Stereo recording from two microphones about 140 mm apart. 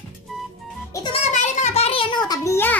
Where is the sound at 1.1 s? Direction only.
55° left (ahead or behind); by 2.8 s 15° left (ahead or behind).